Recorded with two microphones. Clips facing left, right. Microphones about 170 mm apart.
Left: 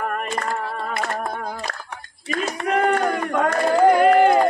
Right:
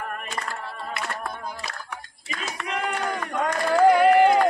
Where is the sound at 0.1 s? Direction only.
55° left (ahead or behind).